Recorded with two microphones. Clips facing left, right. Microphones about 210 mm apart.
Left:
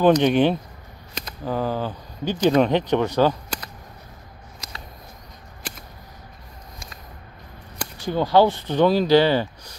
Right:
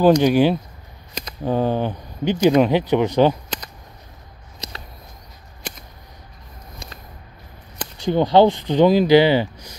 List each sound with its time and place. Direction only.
0.0 s speech: 5° right (ahead or behind)
1.4 s speech: 25° right (ahead or behind)
2.3 s speech: 10° right (ahead or behind)
8.1 s speech: 20° right (ahead or behind)